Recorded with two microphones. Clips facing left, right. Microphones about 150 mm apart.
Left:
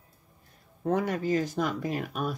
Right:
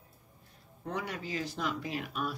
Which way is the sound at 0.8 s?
45° left (ahead or behind).